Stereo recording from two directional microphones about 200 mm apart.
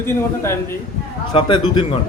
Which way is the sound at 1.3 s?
25° left (ahead or behind).